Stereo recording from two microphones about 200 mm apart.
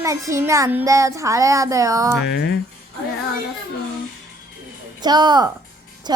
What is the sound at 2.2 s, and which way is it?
Speech, 55° left (ahead or behind).